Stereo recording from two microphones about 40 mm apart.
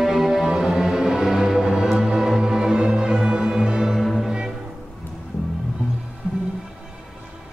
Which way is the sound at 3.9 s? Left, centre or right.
Centre.